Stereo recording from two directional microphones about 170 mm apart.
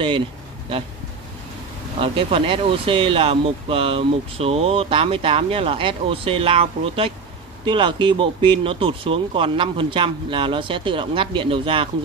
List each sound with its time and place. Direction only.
2.0 s speech: 30° right (ahead or behind)